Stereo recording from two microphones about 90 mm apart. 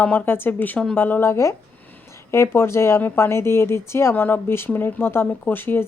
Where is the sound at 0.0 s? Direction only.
15° left (ahead or behind).